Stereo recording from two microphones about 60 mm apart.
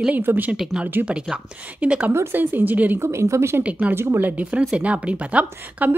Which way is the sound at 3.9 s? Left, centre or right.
Right.